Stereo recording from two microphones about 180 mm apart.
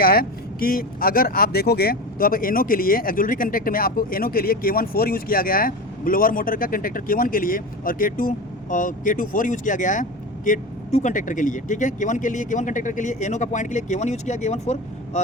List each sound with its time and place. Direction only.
0.0 s speech: 55° left (ahead or behind); by 15.2 s 40° left (ahead or behind)